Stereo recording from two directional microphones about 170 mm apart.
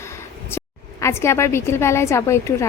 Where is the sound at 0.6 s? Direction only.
15° left (ahead or behind).